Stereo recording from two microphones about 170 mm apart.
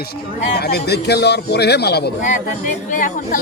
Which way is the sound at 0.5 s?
70° left (ahead or behind).